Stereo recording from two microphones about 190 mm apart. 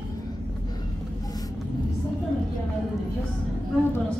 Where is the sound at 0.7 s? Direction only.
20° left (ahead or behind).